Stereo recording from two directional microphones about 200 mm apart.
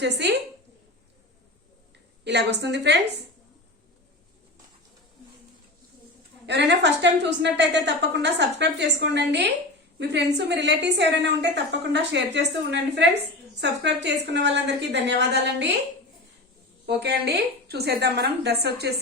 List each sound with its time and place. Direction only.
0.0 s a woman's voice: 60° right (ahead or behind)
2.2 s a woman's voice: 60° right (ahead or behind)
6.4 s a woman's voice: 60° right (ahead or behind)
16.8 s a woman's voice: 55° right (ahead or behind)